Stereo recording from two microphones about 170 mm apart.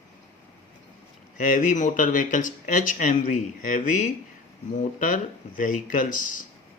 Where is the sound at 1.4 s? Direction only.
50° left (ahead or behind).